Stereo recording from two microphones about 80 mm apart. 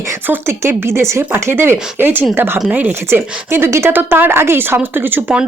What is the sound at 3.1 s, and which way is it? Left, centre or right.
A woman's voice, right.